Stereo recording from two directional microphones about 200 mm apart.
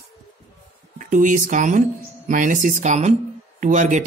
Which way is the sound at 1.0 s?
40° right (ahead or behind).